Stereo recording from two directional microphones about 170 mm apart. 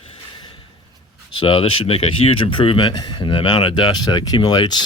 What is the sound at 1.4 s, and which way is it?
Speech, 30° left (ahead or behind).